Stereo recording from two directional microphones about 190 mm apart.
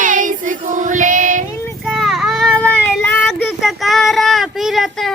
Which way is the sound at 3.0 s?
10° left (ahead or behind).